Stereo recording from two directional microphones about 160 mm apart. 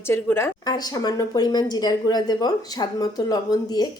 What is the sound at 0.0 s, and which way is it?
Speech, 15° left (ahead or behind).